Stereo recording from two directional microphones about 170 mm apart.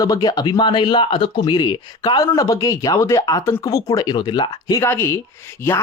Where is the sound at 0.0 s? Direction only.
20° left (ahead or behind).